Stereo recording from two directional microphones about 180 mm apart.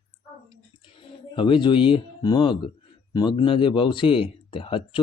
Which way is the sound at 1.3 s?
25° left (ahead or behind).